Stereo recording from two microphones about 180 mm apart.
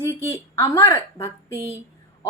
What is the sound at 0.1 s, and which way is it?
A woman's voice, 15° left (ahead or behind).